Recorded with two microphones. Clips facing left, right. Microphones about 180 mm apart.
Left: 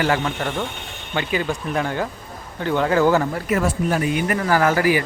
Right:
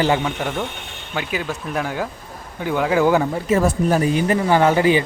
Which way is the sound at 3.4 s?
30° right (ahead or behind).